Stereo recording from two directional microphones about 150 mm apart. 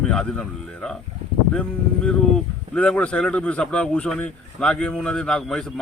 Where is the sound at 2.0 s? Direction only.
5° left (ahead or behind).